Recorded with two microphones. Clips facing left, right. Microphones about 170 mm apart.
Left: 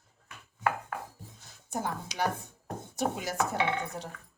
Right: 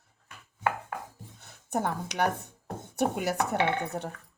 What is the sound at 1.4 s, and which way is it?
Speech, 60° right (ahead or behind).